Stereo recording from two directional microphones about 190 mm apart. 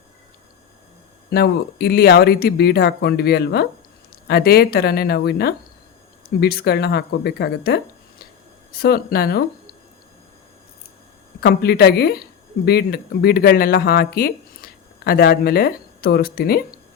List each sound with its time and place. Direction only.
1.3 s speech: 55° left (ahead or behind)
11.3 s speech: 55° left (ahead or behind)